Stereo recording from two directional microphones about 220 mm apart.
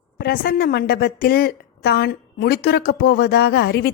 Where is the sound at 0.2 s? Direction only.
45° left (ahead or behind).